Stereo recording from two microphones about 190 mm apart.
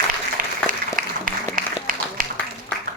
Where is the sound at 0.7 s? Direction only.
45° right (ahead or behind).